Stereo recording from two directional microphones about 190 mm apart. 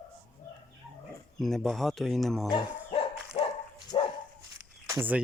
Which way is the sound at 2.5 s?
30° left (ahead or behind).